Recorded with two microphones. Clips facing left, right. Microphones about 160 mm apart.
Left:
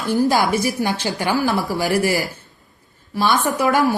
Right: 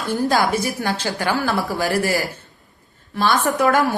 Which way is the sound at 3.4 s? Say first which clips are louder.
Right 1 dB; 10° left (ahead or behind).